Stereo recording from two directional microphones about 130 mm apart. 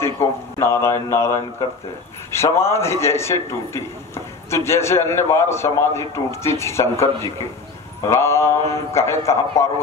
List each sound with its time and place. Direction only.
0.0 s a man's voice: 20° left (ahead or behind)
8.1 s a man's voice: 20° left (ahead or behind)